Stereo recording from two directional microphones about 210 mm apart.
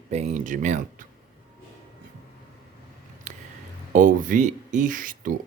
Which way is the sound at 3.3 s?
35° right (ahead or behind).